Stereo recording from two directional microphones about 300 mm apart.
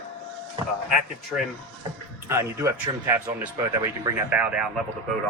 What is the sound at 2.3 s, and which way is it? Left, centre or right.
Speech, centre.